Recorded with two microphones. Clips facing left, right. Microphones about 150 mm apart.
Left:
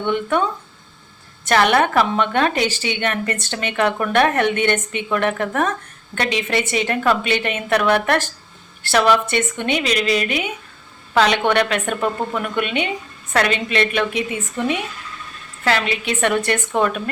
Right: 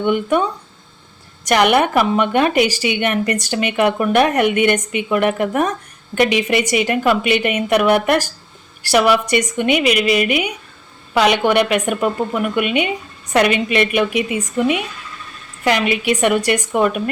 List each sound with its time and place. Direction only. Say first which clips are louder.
0.0 s a woman's voice: right 3 dB; 10° right (ahead or behind)
1.5 s a woman's voice: right 2 dB; 15° right (ahead or behind)